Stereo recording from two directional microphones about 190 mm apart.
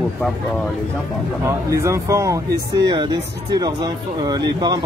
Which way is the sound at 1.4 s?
15° right (ahead or behind).